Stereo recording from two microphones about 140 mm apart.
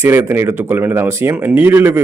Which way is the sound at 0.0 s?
15° right (ahead or behind).